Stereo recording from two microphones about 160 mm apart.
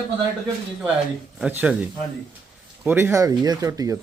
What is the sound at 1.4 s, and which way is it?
Speech, 5° right (ahead or behind).